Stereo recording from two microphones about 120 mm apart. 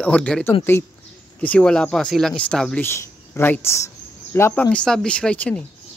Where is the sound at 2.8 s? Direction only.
20° left (ahead or behind).